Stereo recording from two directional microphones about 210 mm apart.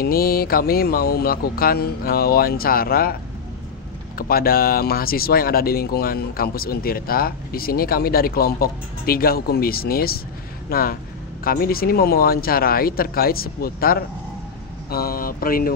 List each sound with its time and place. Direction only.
0.0 s speech: 45° left (ahead or behind)
4.2 s speech: 45° left (ahead or behind)